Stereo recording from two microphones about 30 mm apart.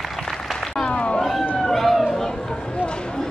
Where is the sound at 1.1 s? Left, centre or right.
Centre.